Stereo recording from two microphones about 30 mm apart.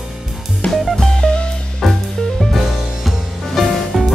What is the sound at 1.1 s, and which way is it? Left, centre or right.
Music, left.